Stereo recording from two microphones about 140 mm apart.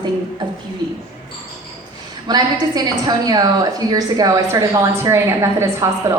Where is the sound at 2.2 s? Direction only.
30° right (ahead or behind).